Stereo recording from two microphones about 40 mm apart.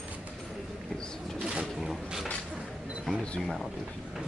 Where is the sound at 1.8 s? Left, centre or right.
Centre.